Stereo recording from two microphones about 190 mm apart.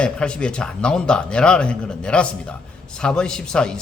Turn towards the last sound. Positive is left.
turn(degrees=5)  # may be behind; listen again after turning